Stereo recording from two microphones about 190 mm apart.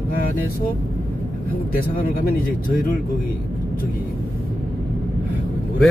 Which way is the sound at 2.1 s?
50° left (ahead or behind).